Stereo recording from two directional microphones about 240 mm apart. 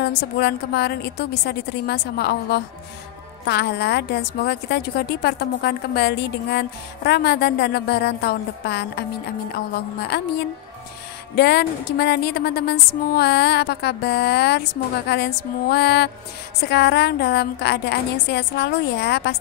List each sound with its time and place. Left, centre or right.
0.0 s speech: left
10.1 s a woman's voice: left
11.3 s speech: left